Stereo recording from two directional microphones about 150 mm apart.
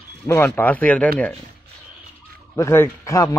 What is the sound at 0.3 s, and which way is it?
Speech, 15° left (ahead or behind).